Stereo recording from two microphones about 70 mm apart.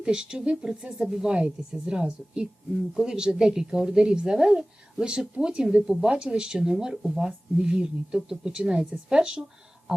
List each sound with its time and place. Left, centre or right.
0.0 s speech: centre